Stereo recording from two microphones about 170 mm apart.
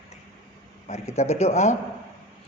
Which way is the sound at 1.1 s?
40° left (ahead or behind).